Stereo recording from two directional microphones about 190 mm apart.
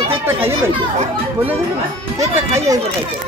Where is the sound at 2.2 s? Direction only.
15° right (ahead or behind).